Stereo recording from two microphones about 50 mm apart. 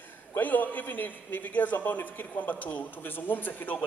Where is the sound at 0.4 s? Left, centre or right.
Left.